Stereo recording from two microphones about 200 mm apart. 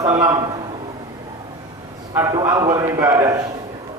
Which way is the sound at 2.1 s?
15° right (ahead or behind).